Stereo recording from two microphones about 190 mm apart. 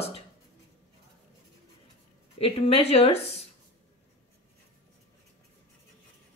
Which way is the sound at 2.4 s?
30° left (ahead or behind).